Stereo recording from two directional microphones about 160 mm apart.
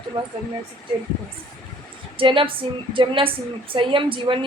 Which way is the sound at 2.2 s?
35° right (ahead or behind).